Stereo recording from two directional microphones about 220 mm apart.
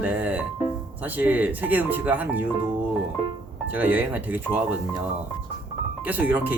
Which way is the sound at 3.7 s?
10° right (ahead or behind).